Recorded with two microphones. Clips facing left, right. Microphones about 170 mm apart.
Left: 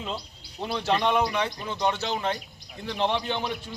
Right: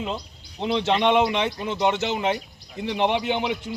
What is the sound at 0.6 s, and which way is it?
A man's voice, 20° right (ahead or behind).